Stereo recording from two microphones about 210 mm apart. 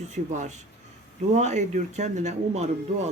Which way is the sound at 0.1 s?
35° right (ahead or behind).